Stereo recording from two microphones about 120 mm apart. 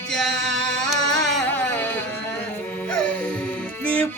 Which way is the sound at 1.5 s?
15° left (ahead or behind).